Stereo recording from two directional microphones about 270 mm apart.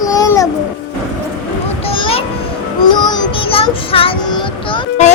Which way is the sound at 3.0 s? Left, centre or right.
Centre.